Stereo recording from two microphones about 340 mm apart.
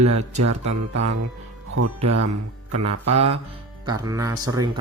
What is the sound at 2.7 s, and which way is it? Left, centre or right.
Music, right.